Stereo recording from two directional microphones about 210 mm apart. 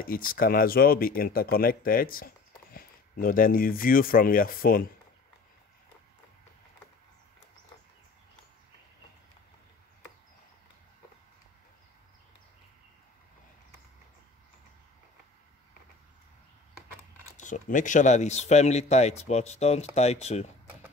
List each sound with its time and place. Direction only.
0.0 s speech: 40° left (ahead or behind)
17.4 s speech: 35° left (ahead or behind)